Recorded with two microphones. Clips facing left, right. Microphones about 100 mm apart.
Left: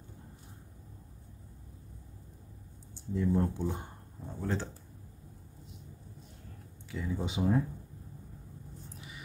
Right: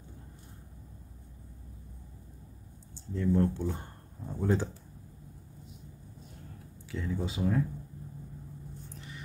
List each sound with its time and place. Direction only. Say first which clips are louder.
3.2 s speech: right 2 dB; 10° left (ahead or behind)
4.3 s speech: right 5 dB; 10° right (ahead or behind)
6.9 s speech: right 1 dB; 5° left (ahead or behind)
7.2 s speech: left 2 dB; 20° left (ahead or behind)